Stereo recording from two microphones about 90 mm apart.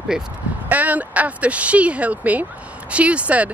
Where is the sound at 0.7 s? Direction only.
15° right (ahead or behind).